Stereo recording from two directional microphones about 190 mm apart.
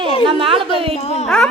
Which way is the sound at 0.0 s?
25° right (ahead or behind).